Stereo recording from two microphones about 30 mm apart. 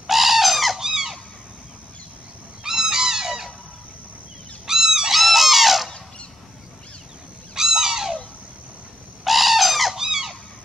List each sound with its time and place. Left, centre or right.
0.0 s bird: centre
0.7 s squeak: centre
2.6 s goose: centre
4.6 s a sound: centre
5.1 s a sound: centre
7.5 s crow: centre
9.2 s bird: centre
9.9 s squeak: centre